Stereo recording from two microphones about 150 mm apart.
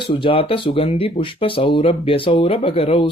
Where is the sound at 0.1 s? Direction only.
35° left (ahead or behind).